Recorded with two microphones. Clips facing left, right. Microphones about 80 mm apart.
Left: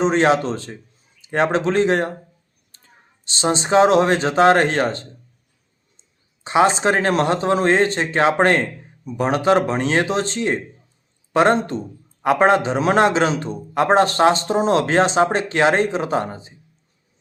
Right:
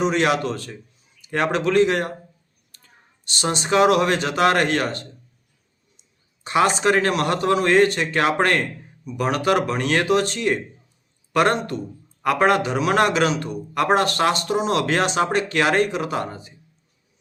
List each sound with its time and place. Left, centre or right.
0.0 s a man's voice: left
2.7 s whispering: left
3.2 s a man's voice: left